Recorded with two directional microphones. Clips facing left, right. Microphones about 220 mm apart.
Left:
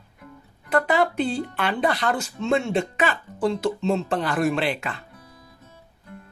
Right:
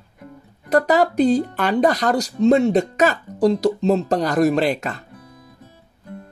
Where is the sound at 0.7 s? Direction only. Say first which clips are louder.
Right 5 dB; 40° right (ahead or behind).